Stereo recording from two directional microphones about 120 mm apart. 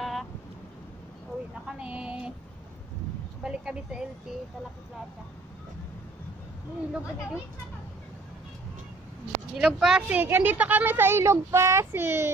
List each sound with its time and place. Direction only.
0.0 s vehicle: centre (ahead or behind)
1.7 s a sound: 10° right (ahead or behind)
3.4 s speech: 5° right (ahead or behind)
9.6 s speech: 5° right (ahead or behind); by 12.3 s 20° right (ahead or behind)